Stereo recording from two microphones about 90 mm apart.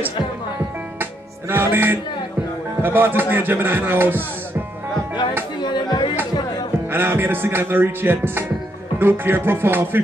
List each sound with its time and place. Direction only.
1.5 s music: 25° right (ahead or behind)
2.8 s speech: 25° right (ahead or behind)
5.6 s music: 55° left (ahead or behind)
6.9 s speech: 25° right (ahead or behind)